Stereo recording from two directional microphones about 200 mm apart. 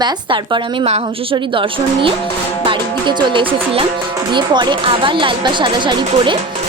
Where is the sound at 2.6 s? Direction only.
25° right (ahead or behind).